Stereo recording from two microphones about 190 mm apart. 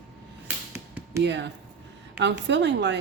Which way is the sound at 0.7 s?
15° right (ahead or behind).